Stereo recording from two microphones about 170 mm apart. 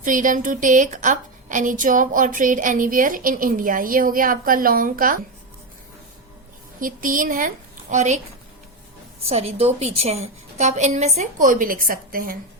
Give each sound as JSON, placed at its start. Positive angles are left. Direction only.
{"t": 0.0, "sound": "a woman's voice", "side_deg": -50}
{"t": 6.7, "sound": "a woman's voice", "side_deg": -55}
{"t": 9.3, "sound": "a woman's voice", "side_deg": -35}